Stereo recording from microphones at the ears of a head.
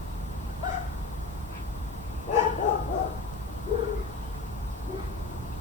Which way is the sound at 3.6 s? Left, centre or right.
Left.